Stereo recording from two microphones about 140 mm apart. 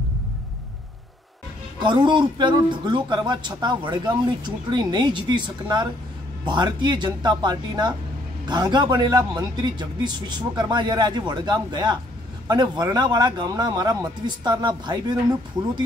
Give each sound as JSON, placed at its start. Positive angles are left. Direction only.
{"t": 1.8, "sound": "a man's voice", "side_deg": -35}